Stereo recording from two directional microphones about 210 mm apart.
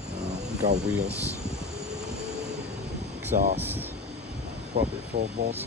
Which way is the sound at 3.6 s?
10° right (ahead or behind).